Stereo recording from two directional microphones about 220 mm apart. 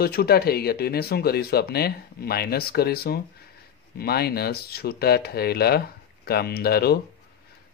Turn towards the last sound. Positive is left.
turn(degrees=45)  # may be behind; listen again after turning